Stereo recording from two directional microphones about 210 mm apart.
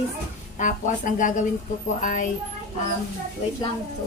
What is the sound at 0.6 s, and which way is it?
A woman's voice, 35° left (ahead or behind).